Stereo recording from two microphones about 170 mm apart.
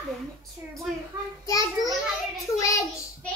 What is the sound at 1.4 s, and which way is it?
Child singing, 20° left (ahead or behind).